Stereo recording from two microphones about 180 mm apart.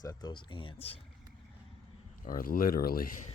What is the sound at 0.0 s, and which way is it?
Speech, 20° left (ahead or behind).